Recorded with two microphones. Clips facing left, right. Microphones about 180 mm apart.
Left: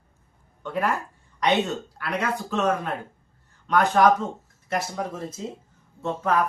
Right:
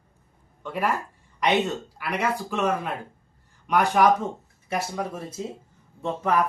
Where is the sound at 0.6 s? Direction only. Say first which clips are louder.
Left 1 dB; 10° right (ahead or behind).